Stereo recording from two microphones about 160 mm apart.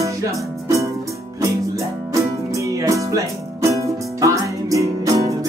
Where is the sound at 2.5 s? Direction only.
20° right (ahead or behind).